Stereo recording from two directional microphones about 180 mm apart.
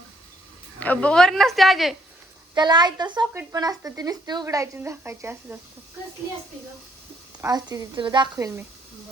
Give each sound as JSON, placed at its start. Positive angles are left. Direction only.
{"t": 0.8, "sound": "a woman's voice", "side_deg": 10}
{"t": 2.6, "sound": "speech", "side_deg": -25}
{"t": 7.4, "sound": "speech", "side_deg": -20}